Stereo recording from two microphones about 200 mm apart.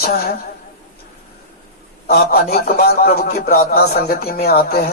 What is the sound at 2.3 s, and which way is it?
Speech, 50° left (ahead or behind).